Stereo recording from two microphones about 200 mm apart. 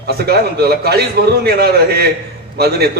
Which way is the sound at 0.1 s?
50° right (ahead or behind).